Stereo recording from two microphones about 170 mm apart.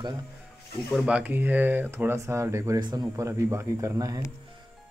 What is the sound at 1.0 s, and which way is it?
Speech, 10° right (ahead or behind).